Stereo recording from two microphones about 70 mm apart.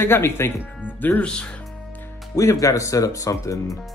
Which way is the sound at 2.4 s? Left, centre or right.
Left.